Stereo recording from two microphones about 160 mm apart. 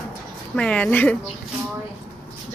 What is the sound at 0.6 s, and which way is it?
Speech, 5° left (ahead or behind).